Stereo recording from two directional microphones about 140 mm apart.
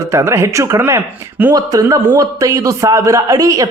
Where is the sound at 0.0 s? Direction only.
20° right (ahead or behind).